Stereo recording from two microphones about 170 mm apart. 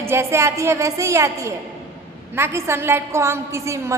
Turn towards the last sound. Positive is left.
turn(degrees=-15)  # may be behind; listen again after turning